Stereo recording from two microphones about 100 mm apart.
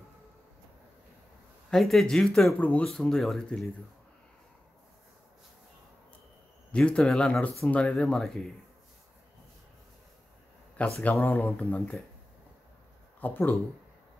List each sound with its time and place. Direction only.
1.7 s speech: centre (ahead or behind)
6.7 s speech: 10° left (ahead or behind)
11.0 s speech: 20° left (ahead or behind)
13.2 s speech: 20° left (ahead or behind)